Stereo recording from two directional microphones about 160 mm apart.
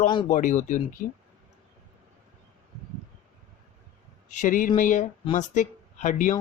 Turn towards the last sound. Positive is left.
turn(degrees=50)  # may be behind; listen again after turning